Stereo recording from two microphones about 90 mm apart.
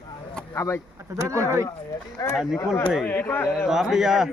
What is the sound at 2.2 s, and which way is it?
Speech, 35° left (ahead or behind).